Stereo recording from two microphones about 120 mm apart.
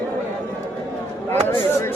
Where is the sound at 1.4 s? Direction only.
20° left (ahead or behind).